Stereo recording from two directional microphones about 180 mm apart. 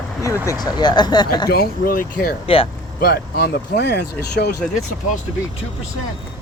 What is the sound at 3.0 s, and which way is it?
Speech, 60° left (ahead or behind).